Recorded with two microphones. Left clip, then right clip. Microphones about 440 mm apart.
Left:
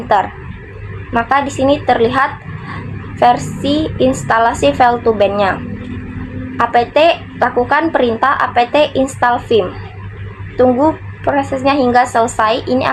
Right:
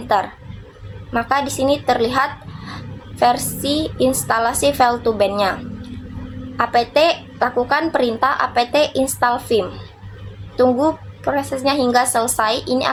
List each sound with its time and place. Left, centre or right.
1.1 s a woman's voice: right
6.6 s a woman's voice: right